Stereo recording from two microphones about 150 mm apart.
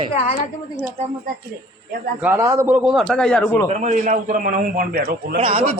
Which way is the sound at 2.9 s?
5° left (ahead or behind).